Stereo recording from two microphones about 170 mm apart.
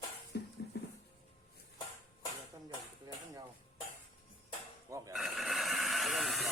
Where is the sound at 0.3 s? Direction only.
70° left (ahead or behind).